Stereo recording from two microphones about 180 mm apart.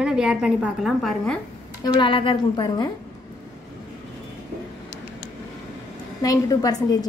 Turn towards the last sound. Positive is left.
turn(degrees=20)  # may be behind; listen again after turning